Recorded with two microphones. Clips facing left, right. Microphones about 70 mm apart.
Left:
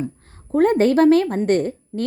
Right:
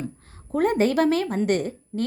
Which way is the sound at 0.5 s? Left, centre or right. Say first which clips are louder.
Left 5 dB; left.